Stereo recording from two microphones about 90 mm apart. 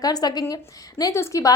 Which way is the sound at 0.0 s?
45° left (ahead or behind).